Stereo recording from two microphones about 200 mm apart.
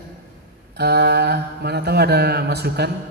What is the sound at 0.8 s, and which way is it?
Mantra, 55° right (ahead or behind).